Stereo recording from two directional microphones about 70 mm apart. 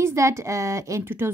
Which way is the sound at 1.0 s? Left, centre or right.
Right.